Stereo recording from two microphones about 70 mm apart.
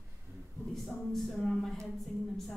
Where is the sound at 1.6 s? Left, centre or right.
Centre.